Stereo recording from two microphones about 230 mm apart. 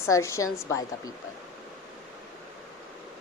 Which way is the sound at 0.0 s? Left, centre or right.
Centre.